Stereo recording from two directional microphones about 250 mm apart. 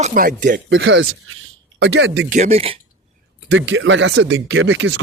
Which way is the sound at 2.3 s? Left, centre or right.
Right.